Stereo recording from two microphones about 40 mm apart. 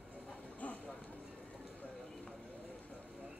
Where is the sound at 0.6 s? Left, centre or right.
Left.